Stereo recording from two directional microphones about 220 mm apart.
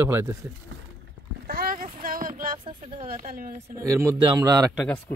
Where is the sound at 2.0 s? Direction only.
40° right (ahead or behind).